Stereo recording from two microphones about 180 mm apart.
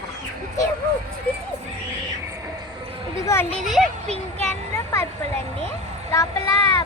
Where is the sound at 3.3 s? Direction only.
15° left (ahead or behind).